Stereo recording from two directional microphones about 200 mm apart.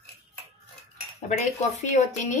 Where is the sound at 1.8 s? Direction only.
35° left (ahead or behind).